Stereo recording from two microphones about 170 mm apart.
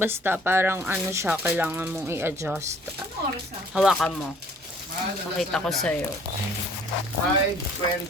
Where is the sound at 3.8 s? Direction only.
Centre (ahead or behind).